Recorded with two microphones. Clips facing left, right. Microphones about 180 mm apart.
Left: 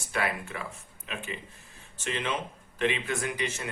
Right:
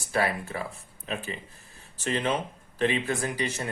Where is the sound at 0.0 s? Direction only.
35° right (ahead or behind).